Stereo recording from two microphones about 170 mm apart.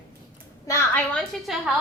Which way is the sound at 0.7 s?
15° left (ahead or behind).